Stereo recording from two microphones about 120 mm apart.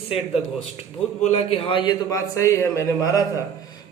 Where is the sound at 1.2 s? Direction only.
60° left (ahead or behind); by 2.0 s 40° left (ahead or behind).